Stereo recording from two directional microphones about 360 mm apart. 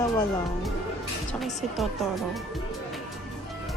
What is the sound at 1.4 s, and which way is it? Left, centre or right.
Speech, centre.